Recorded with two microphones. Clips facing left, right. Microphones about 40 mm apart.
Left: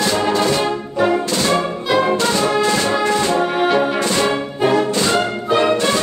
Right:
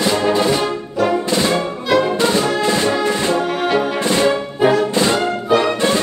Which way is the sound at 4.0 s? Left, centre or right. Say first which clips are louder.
Right 2 dB; centre.